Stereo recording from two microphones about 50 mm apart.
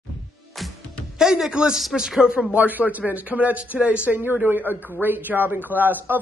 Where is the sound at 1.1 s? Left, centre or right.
Centre.